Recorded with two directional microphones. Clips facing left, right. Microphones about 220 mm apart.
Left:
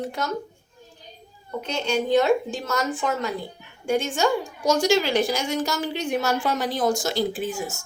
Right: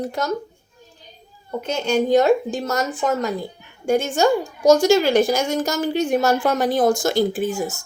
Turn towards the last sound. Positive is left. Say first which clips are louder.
# right 5 dB
turn(degrees=-40)  # may be behind; listen again after turning